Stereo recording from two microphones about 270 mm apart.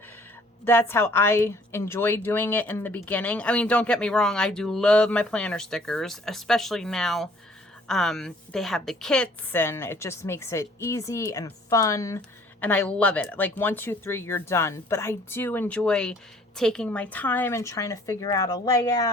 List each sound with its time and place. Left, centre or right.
0.6 s a woman's voice: centre